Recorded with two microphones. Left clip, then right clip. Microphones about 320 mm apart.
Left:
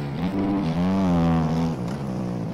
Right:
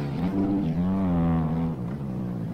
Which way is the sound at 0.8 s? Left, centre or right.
Left.